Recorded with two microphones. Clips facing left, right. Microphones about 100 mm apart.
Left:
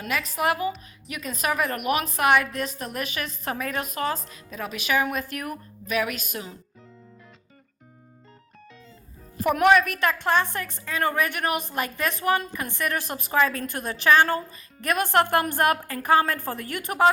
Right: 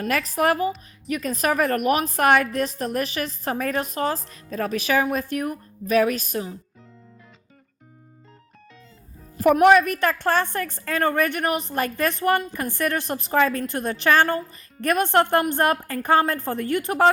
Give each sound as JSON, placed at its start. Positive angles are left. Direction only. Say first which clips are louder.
{"t": 0.1, "sound": "a woman's voice", "louder": "right 3 dB", "side_deg": -40}
{"t": 9.4, "sound": "a woman's voice", "louder": "right 4 dB", "side_deg": -40}